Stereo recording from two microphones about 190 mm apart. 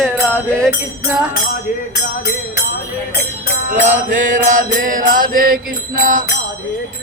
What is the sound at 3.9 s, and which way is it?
Mantra, 40° right (ahead or behind).